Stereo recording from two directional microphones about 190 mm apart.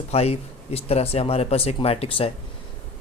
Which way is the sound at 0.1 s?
35° left (ahead or behind).